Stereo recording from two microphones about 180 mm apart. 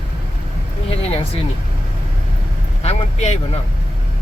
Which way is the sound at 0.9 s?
30° left (ahead or behind).